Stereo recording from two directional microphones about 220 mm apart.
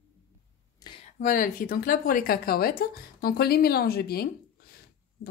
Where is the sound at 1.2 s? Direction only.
40° left (ahead or behind).